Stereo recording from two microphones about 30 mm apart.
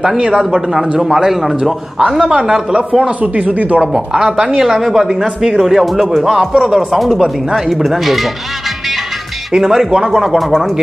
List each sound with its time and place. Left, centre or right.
0.7 s a man's voice: centre
2.2 s a man's voice: right
3.2 s speech: right
3.8 s speech: right
4.6 s a man's voice: centre
5.2 s speech: centre
5.6 s a man's voice: centre
9.6 s a man's voice: centre
9.8 s speech: right